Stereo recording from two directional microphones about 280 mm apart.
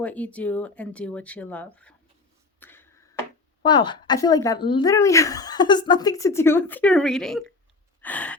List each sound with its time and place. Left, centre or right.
0.0 s speech: centre
2.6 s a sound: centre
3.6 s speech: centre
8.0 s gasp: centre